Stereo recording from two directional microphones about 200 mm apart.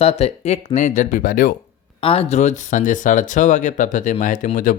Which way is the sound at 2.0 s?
30° left (ahead or behind).